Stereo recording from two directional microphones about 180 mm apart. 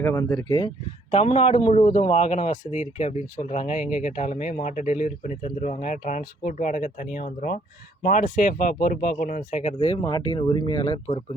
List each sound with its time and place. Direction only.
0.0 s speech: 15° left (ahead or behind)
1.1 s a man's voice: 35° left (ahead or behind)